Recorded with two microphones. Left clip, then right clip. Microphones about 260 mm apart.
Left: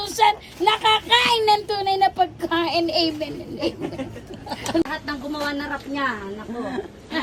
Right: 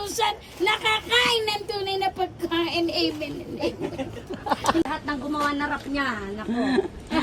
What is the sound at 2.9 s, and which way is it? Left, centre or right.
Speech, centre.